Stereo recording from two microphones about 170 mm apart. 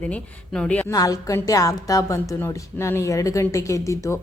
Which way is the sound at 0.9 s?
20° left (ahead or behind).